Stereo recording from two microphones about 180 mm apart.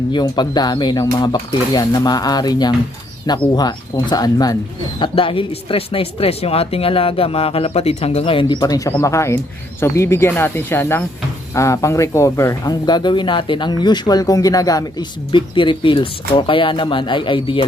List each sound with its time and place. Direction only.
0.1 s speech: 25° left (ahead or behind)